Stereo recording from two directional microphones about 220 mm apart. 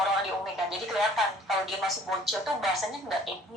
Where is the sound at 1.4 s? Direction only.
Centre (ahead or behind).